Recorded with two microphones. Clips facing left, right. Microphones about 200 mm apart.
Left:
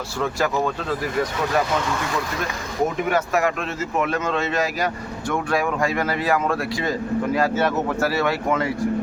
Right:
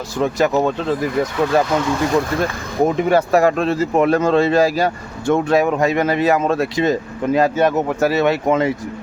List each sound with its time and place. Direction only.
0.2 s speech: 20° right (ahead or behind)
3.1 s speech: 35° right (ahead or behind)